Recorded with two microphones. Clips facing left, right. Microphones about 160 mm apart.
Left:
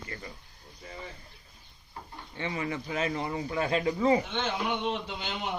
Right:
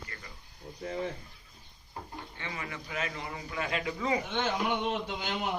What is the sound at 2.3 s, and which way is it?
A man's voice, 30° left (ahead or behind).